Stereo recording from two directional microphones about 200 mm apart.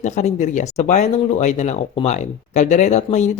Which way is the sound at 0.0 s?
35° left (ahead or behind).